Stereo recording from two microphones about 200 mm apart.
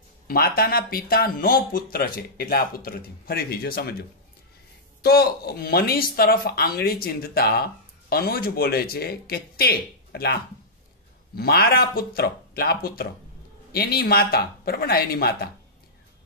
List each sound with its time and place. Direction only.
0.3 s speech: 50° left (ahead or behind)
5.0 s speech: 50° left (ahead or behind)